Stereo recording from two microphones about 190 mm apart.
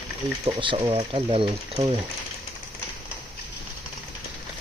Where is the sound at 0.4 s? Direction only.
25° right (ahead or behind).